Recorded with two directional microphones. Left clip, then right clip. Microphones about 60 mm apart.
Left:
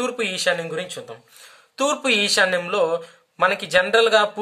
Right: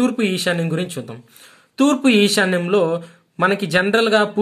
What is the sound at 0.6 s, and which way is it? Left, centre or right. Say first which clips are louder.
Speech: right 3 dB; right.